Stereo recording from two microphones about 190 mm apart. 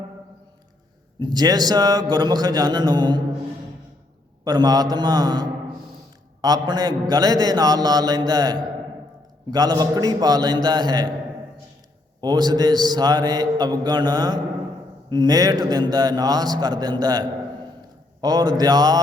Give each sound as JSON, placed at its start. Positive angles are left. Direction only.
{"t": 1.2, "sound": "a man's voice", "side_deg": -20}
{"t": 4.4, "sound": "a man's voice", "side_deg": -20}
{"t": 12.2, "sound": "a man's voice", "side_deg": -20}